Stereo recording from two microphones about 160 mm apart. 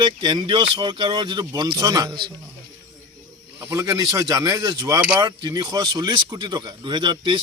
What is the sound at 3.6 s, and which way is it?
Speech, 15° right (ahead or behind).